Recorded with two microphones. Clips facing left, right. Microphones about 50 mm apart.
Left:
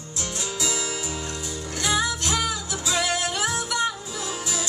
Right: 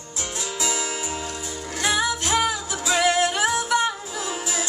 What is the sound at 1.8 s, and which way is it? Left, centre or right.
Music, right.